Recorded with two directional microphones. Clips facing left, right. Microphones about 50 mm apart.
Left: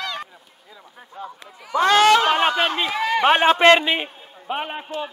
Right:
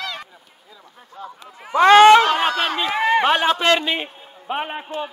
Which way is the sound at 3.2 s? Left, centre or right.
Left.